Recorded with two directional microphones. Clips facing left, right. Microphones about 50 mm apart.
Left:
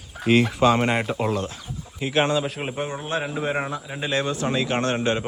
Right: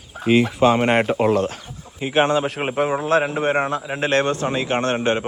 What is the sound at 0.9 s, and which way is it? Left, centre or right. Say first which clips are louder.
Speech: right 6 dB; right.